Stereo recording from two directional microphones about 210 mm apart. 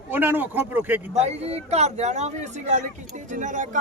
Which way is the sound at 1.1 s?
30° right (ahead or behind).